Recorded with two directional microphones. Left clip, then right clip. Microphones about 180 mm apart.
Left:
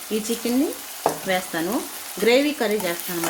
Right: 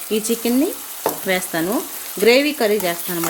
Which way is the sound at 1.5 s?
35° right (ahead or behind).